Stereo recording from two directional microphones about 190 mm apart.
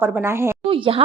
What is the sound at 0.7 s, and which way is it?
Speech, 30° right (ahead or behind).